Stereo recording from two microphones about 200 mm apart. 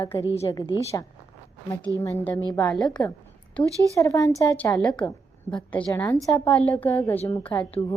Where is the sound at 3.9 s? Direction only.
15° left (ahead or behind).